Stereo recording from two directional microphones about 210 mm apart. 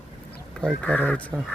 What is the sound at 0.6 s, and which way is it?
Speech, 5° left (ahead or behind).